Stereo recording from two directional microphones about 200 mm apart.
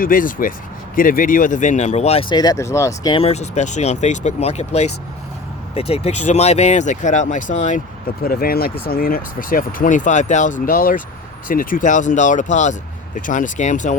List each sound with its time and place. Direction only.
0.0 s speech: 45° left (ahead or behind)
2.3 s speech: 20° left (ahead or behind); by 13.9 s 35° left (ahead or behind)